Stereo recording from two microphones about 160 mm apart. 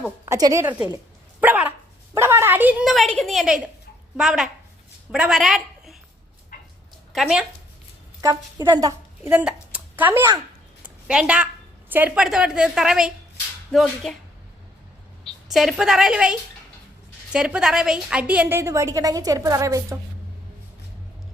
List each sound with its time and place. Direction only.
0.3 s a woman's voice: 20° right (ahead or behind)
1.4 s dog: 10° right (ahead or behind)
2.1 s a woman's voice: 15° right (ahead or behind)
6.5 s a sound: 60° left (ahead or behind)
7.1 s speech: 5° right (ahead or behind)
8.2 s speech: 20° right (ahead or behind)
9.3 s speech: 10° right (ahead or behind)
10.8 s a sound: 5° right (ahead or behind)
11.9 s a woman's voice: 10° right (ahead or behind)
15.2 s a woman's voice: centre (ahead or behind); by 20.0 s 20° right (ahead or behind)